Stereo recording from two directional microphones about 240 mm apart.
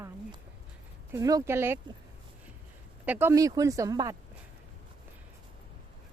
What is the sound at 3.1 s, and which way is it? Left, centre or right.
Speech, centre.